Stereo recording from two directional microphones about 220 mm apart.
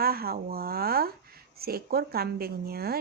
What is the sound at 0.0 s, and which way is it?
A woman's voice, 45° right (ahead or behind).